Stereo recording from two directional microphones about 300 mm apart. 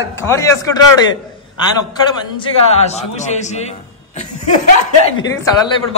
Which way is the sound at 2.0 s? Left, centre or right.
Centre.